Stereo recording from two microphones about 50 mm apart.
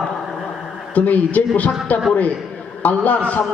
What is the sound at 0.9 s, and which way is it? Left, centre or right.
A man's voice, left.